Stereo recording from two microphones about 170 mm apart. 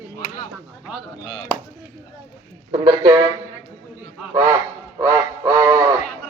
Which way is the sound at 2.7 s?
25° right (ahead or behind).